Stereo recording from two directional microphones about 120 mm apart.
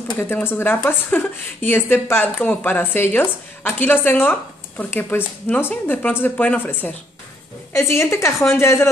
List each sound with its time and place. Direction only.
0.1 s a woman's voice: 20° left (ahead or behind)